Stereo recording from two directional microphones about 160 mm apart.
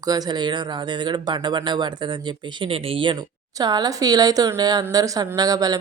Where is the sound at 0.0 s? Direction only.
25° right (ahead or behind).